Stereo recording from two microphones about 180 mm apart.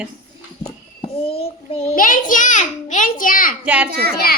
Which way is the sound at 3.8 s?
60° right (ahead or behind).